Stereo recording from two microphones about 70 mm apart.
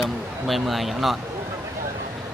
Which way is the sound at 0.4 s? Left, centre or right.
Centre.